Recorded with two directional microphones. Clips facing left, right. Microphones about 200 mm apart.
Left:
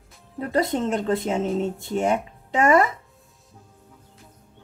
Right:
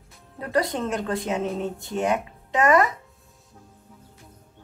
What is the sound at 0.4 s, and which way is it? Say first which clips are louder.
A woman's voice: left 2 dB; 25° left (ahead or behind).